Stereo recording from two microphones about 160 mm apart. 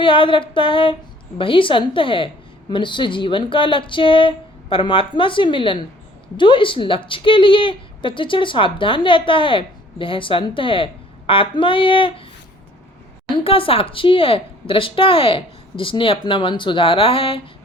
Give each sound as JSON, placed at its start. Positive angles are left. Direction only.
{"t": 0.0, "sound": "speech", "side_deg": 30}
{"t": 13.3, "sound": "speech", "side_deg": 35}